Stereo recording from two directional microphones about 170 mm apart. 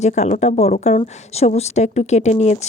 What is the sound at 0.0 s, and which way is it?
A woman's voice, 40° left (ahead or behind).